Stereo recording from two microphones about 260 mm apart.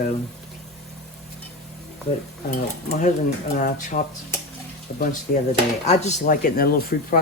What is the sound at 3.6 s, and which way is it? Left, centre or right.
Speech, left.